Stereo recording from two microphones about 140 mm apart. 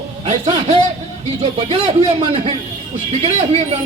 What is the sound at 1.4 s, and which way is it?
Speech, 45° right (ahead or behind).